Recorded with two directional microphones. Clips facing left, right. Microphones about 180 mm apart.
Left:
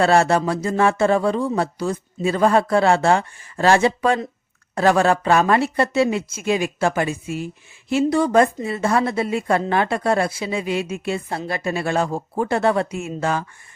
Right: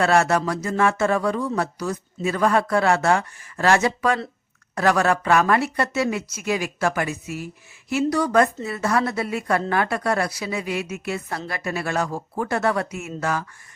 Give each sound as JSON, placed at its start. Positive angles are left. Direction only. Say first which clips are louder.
{"t": 0.0, "sound": "speech", "louder": "left 3 dB", "side_deg": 30}